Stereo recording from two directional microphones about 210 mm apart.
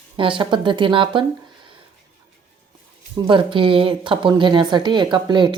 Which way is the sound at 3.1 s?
25° right (ahead or behind).